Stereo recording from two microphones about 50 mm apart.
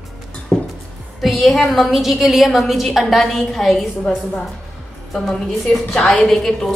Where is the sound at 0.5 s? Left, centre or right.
Left.